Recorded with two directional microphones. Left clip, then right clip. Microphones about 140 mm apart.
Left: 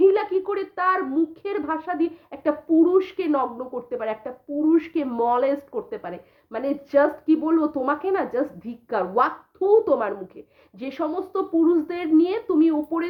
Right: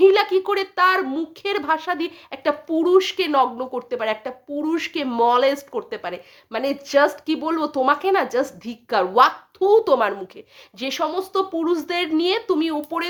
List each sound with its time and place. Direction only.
0.0 s a child's voice: 25° right (ahead or behind)